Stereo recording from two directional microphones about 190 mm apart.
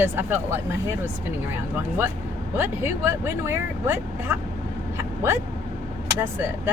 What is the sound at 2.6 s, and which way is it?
Speech, 15° right (ahead or behind).